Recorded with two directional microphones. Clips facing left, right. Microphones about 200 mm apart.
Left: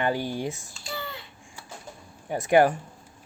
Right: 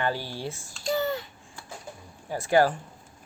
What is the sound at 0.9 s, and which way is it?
Babbling, 45° right (ahead or behind).